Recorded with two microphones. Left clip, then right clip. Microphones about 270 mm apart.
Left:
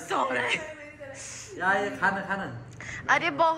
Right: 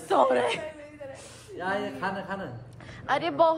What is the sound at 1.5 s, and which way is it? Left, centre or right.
A woman's voice, centre.